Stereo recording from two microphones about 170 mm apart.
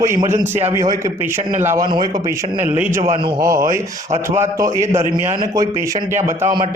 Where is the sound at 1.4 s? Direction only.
45° right (ahead or behind).